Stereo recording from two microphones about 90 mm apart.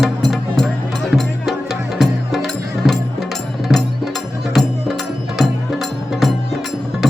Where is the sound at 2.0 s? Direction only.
5° right (ahead or behind).